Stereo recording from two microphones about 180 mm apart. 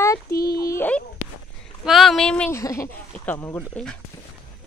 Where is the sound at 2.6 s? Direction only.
15° left (ahead or behind).